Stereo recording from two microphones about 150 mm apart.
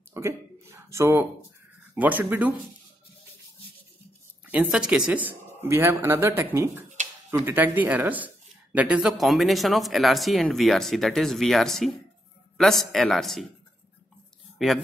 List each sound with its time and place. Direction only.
0.1 s speech: 20° right (ahead or behind)
4.5 s a man's voice: 10° right (ahead or behind)
14.6 s speech: centre (ahead or behind)